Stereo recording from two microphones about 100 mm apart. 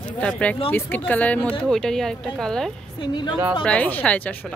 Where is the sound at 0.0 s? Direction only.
10° left (ahead or behind).